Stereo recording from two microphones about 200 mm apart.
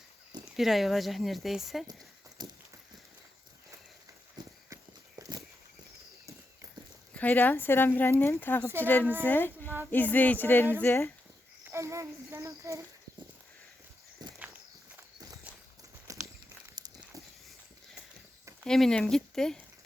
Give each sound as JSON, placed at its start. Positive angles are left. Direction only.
{"t": 0.5, "sound": "speech", "side_deg": 0}
{"t": 2.4, "sound": "a sound", "side_deg": -20}
{"t": 4.4, "sound": "clip-clop", "side_deg": -20}
{"t": 4.7, "sound": "horse", "side_deg": -15}
{"t": 7.1, "sound": "speech", "side_deg": 10}
{"t": 11.7, "sound": "speech", "side_deg": -15}
{"t": 15.5, "sound": "walk", "side_deg": -5}
{"t": 16.8, "sound": "a sound", "side_deg": -20}
{"t": 18.6, "sound": "speech", "side_deg": 0}